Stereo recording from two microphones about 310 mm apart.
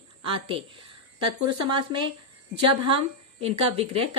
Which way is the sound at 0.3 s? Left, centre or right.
Centre.